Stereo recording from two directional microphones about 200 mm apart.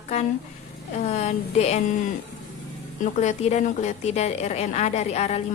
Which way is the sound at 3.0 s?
35° left (ahead or behind).